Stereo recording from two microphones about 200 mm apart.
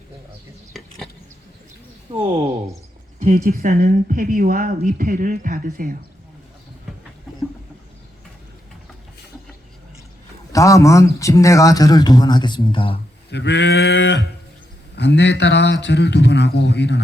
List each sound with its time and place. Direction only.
0.7 s a sound: centre (ahead or behind)
2.1 s speech: 30° right (ahead or behind)
3.2 s a woman's voice: 40° right (ahead or behind)
10.5 s speech: 15° left (ahead or behind)
13.3 s speech: 60° left (ahead or behind)